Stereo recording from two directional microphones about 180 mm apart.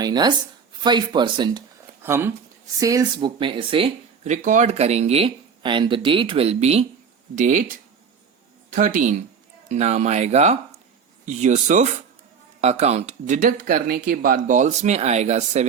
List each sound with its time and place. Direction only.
0.0 s speech: 25° right (ahead or behind)
2.0 s speech: 15° right (ahead or behind); by 6.8 s 35° right (ahead or behind)
7.3 s speech: 45° right (ahead or behind)
8.7 s speech: 45° right (ahead or behind)